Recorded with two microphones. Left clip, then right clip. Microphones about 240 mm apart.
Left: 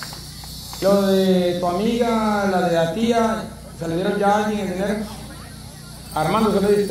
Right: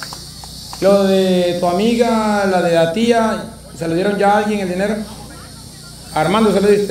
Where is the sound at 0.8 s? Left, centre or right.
Right.